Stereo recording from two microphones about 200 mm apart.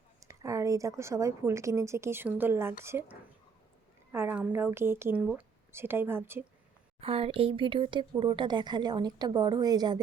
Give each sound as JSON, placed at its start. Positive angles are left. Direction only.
{"t": 0.2, "sound": "a woman's voice", "side_deg": -15}
{"t": 7.0, "sound": "speech", "side_deg": -30}